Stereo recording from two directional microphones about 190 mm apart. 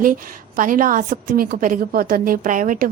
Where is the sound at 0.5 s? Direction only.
45° right (ahead or behind).